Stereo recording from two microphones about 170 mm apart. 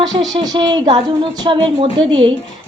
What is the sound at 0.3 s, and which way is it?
A woman's voice, 30° right (ahead or behind).